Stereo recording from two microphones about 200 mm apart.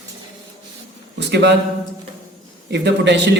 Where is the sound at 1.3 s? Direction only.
60° right (ahead or behind).